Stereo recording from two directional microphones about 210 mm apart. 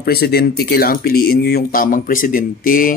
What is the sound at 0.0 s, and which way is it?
Speech, 50° left (ahead or behind).